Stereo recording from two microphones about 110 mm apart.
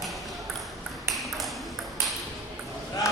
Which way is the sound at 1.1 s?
Centre (ahead or behind).